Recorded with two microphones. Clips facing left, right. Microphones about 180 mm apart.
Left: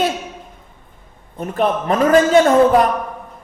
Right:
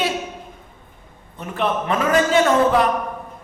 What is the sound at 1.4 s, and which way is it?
A man's voice, 40° left (ahead or behind).